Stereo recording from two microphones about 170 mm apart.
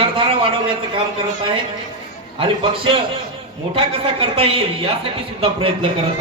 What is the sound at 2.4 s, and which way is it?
A man's voice, 30° right (ahead or behind).